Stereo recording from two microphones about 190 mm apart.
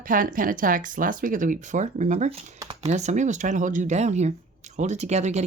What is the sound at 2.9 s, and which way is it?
Speech, 35° right (ahead or behind).